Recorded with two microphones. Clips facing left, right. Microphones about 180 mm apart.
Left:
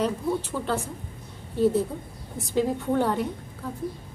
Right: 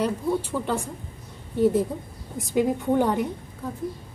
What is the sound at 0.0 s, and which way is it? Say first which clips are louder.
A woman's voice: right 1 dB; 10° right (ahead or behind).